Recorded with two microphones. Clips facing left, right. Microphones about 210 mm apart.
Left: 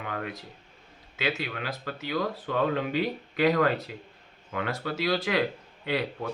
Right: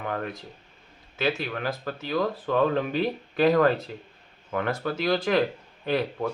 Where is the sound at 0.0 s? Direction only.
35° right (ahead or behind).